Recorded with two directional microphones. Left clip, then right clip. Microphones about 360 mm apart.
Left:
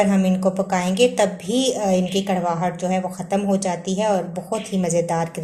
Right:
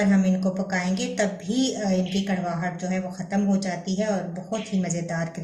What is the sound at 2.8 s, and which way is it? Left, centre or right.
A woman's voice, left.